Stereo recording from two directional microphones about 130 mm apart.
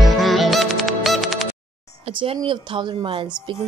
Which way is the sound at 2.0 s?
45° right (ahead or behind).